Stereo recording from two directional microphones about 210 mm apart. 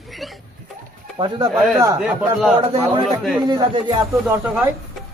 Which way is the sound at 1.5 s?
Centre (ahead or behind).